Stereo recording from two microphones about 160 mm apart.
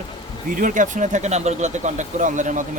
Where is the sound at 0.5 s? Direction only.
55° right (ahead or behind).